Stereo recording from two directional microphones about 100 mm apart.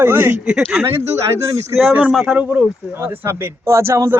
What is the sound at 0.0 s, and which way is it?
Speech, 20° right (ahead or behind).